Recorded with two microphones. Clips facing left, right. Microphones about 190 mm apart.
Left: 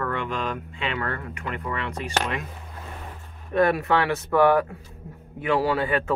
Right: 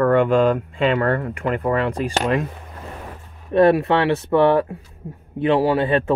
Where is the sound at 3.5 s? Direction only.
30° right (ahead or behind).